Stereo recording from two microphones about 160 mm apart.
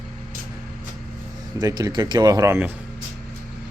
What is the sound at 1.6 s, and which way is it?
Speech, 25° right (ahead or behind).